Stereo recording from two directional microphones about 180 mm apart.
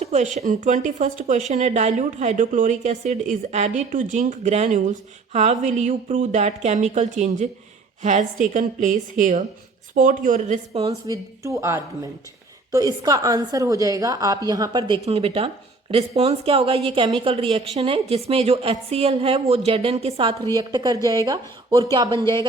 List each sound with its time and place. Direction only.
0.0 s a woman's voice: 40° right (ahead or behind)
11.1 s a woman's voice: 15° right (ahead or behind); by 20.3 s 35° right (ahead or behind)
20.6 s a woman's voice: 25° right (ahead or behind)